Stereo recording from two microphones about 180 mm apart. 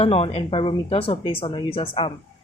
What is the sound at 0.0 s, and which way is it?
A woman's voice, 35° left (ahead or behind).